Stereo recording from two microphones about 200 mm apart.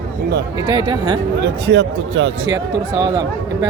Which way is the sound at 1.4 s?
60° right (ahead or behind).